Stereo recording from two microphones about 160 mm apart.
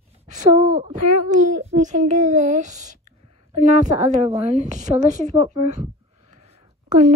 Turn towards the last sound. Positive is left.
turn(degrees=-45)  # may be behind; listen again after turning